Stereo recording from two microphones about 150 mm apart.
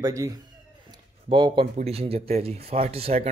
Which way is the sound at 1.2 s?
30° right (ahead or behind).